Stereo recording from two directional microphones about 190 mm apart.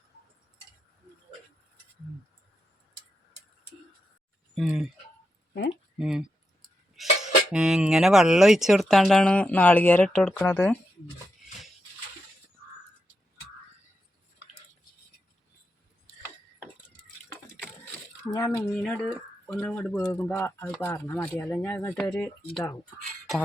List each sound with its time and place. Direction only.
4.5 s cutlery: 5° right (ahead or behind)
6.0 s cutlery: 5° right (ahead or behind)
18.3 s speech: 20° left (ahead or behind)
18.8 s speech: centre (ahead or behind); by 22.8 s 20° left (ahead or behind)